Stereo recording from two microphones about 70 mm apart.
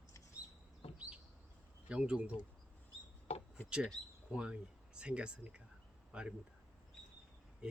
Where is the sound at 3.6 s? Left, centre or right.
Centre.